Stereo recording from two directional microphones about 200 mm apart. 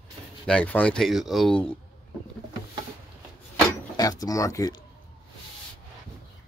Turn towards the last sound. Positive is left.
turn(degrees=15)  # may be behind; listen again after turning